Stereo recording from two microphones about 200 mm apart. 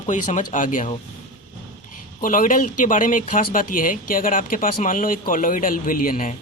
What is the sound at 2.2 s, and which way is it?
Speech, 40° left (ahead or behind).